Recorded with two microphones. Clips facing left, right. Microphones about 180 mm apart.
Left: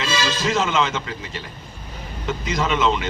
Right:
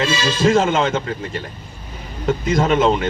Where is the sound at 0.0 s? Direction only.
50° right (ahead or behind).